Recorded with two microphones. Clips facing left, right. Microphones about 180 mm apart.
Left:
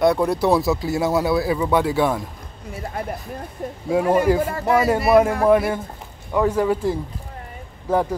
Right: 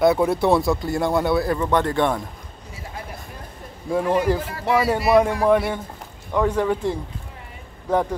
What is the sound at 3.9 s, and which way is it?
Speech, 10° left (ahead or behind).